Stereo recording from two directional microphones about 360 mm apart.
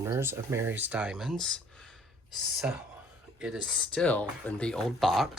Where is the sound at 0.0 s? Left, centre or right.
Centre.